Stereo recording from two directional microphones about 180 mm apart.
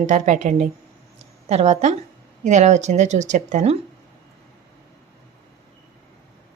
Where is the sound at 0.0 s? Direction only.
40° right (ahead or behind).